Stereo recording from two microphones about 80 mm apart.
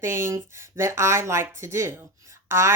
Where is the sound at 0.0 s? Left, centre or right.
Right.